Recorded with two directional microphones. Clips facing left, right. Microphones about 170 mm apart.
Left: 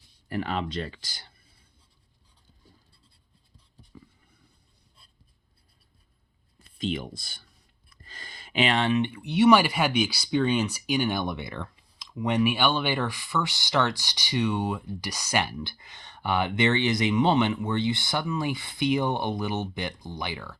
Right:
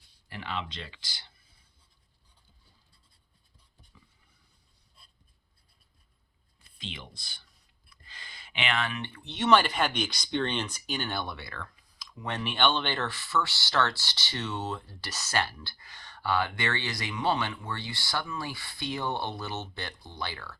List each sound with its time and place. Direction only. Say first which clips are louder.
0.3 s speech: left 7 dB; 45° left (ahead or behind)
3.9 s a sound: left 13 dB; 50° left (ahead or behind)
6.7 s speech: left 13 dB; 45° left (ahead or behind); by 20.6 s 15° left (ahead or behind)